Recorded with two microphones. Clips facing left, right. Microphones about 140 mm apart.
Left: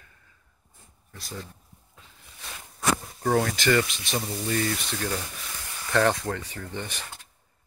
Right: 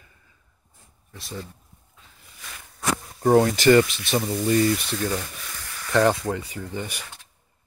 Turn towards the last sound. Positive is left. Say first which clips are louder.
# right 3 dB
turn(degrees=-10)  # may be behind; listen again after turning